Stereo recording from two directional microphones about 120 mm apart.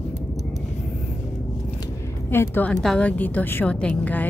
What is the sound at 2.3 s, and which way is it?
A woman's voice, 15° left (ahead or behind).